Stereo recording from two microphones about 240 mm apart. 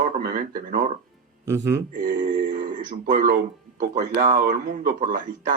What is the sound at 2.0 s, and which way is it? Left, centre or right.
Speech, right.